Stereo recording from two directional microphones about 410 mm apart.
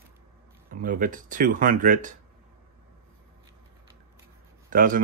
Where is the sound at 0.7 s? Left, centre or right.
Centre.